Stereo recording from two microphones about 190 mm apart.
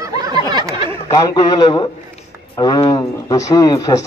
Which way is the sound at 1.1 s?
20° left (ahead or behind).